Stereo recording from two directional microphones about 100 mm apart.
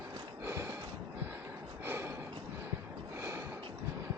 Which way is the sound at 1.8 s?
25° right (ahead or behind).